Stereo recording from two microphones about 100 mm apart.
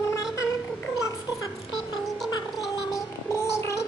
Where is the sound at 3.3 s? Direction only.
30° left (ahead or behind).